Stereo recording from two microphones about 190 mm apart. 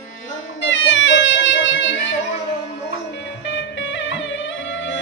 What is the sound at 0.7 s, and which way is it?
Music, 75° left (ahead or behind).